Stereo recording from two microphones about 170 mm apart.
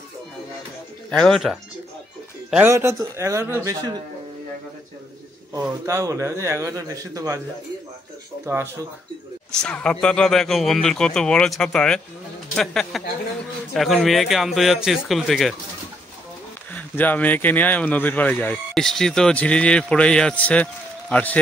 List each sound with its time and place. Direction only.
1.1 s speech: centre (ahead or behind)
2.5 s speech: 15° right (ahead or behind)
5.6 s speech: 20° right (ahead or behind)
9.5 s speech: 5° left (ahead or behind)
16.7 s speech: 10° left (ahead or behind)